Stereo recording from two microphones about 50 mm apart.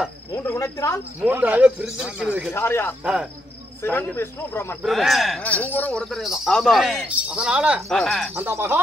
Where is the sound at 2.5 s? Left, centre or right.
Left.